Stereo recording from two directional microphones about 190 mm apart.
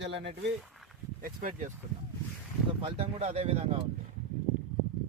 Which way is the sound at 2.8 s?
30° right (ahead or behind).